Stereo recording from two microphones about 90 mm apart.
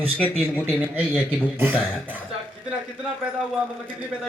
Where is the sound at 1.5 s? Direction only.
20° right (ahead or behind).